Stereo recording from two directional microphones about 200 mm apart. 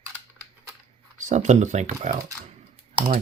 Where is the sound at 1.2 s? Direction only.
35° right (ahead or behind).